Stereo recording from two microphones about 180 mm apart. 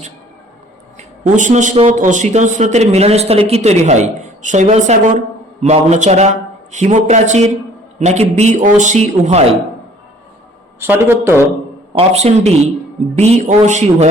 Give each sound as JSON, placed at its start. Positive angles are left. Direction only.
{"t": 0.9, "sound": "a man's voice", "side_deg": -45}
{"t": 10.8, "sound": "a man's voice", "side_deg": -10}
{"t": 11.9, "sound": "a man's voice", "side_deg": -35}